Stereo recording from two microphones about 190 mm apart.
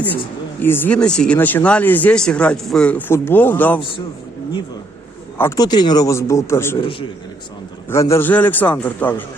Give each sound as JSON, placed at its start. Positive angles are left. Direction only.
{"t": 0.6, "sound": "speech", "side_deg": 10}
{"t": 5.4, "sound": "speech", "side_deg": 15}
{"t": 6.7, "sound": "a man's voice", "side_deg": 30}
{"t": 7.9, "sound": "speech", "side_deg": 15}